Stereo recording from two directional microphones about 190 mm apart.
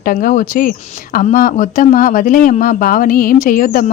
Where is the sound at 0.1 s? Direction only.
50° left (ahead or behind).